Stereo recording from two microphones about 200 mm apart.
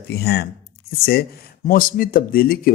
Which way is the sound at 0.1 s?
55° left (ahead or behind).